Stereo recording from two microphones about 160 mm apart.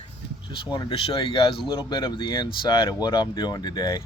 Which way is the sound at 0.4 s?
30° left (ahead or behind).